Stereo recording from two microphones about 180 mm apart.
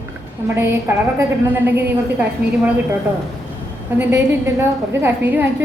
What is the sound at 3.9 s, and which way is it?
A woman's voice, 10° right (ahead or behind).